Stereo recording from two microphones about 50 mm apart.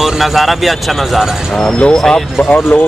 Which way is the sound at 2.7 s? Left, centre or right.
Left.